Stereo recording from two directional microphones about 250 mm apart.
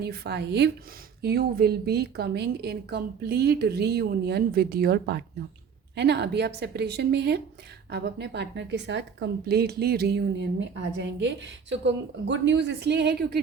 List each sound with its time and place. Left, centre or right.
0.0 s a woman's voice: right